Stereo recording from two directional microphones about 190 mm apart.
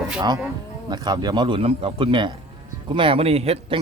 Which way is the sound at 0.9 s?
20° right (ahead or behind).